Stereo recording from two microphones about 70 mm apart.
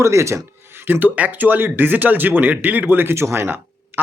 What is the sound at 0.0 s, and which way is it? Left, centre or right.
Speech, right.